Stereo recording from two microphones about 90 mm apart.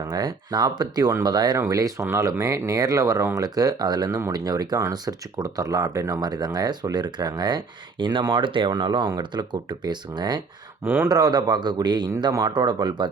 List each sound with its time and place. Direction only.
0.1 s speech: 50° right (ahead or behind)
1.5 s speech: 40° right (ahead or behind); by 8.7 s 65° right (ahead or behind)
8.7 s speech: 55° right (ahead or behind)
10.8 s speech: 25° right (ahead or behind)
11.1 s speech: 45° right (ahead or behind)
12.3 s speech: 40° right (ahead or behind)